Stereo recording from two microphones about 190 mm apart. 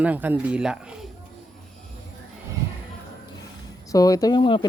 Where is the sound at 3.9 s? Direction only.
20° left (ahead or behind).